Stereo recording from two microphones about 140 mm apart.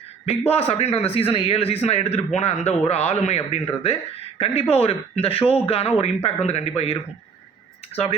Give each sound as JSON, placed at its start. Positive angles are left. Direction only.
{"t": 0.3, "sound": "speech", "side_deg": 45}